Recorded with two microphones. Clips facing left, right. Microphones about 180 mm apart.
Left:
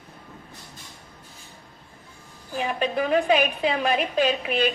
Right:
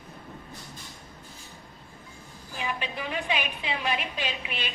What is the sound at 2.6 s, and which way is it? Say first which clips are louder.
A woman's voice: left 9 dB; 40° left (ahead or behind).